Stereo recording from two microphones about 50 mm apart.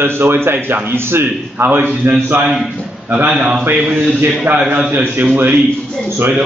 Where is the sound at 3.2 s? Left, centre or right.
Centre.